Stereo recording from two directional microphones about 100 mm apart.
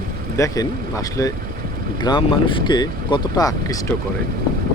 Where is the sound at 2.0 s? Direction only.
50° left (ahead or behind).